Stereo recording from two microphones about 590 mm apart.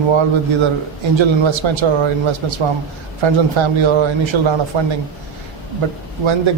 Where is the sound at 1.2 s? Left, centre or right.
Right.